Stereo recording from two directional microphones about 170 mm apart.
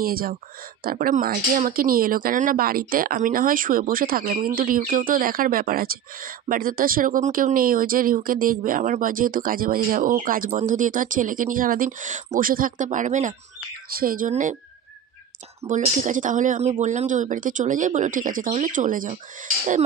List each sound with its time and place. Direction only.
0.0 s speech: 60° right (ahead or behind)
13.8 s speech: 55° right (ahead or behind)
15.7 s speech: 50° right (ahead or behind)